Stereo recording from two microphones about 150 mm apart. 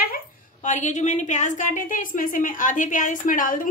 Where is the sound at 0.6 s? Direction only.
55° left (ahead or behind).